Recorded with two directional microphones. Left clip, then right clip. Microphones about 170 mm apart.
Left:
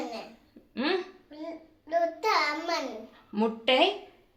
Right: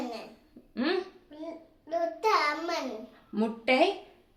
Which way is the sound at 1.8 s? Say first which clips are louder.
Left 1 dB; 20° right (ahead or behind).